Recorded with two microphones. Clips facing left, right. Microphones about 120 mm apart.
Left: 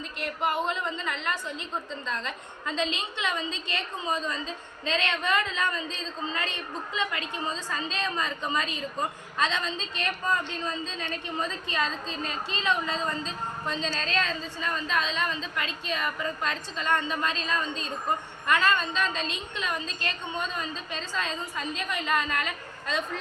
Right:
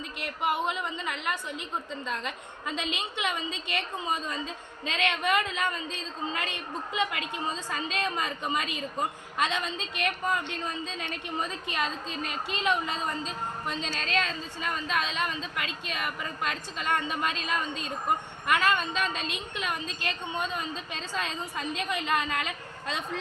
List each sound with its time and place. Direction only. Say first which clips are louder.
0.4 s a woman's voice: left 1 dB; 15° right (ahead or behind)
11.7 s a woman's voice: left 1 dB; 10° right (ahead or behind)